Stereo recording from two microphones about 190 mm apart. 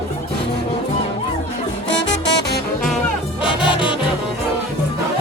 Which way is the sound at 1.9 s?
65° left (ahead or behind).